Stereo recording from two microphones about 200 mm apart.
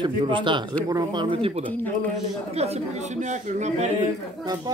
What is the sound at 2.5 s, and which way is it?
Speech, 30° right (ahead or behind).